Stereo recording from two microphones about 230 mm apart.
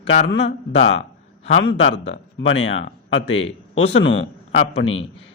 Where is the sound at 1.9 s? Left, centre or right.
Left.